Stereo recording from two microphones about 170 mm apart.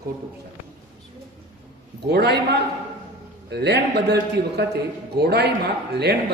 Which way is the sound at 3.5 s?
80° right.